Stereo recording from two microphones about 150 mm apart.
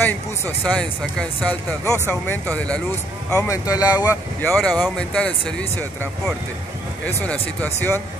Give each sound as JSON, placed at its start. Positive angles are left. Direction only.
{"t": 0.0, "sound": "speech", "side_deg": 10}
{"t": 3.3, "sound": "speech", "side_deg": 20}
{"t": 4.4, "sound": "speech", "side_deg": 5}
{"t": 7.6, "sound": "speech", "side_deg": 15}